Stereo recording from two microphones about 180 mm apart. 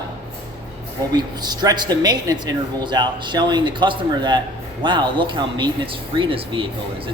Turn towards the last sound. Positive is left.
turn(degrees=-30)  # may be behind; listen again after turning